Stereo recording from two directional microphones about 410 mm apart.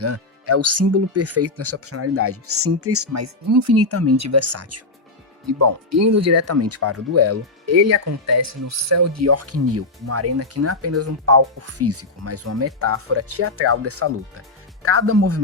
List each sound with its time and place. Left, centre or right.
0.0 s speech: right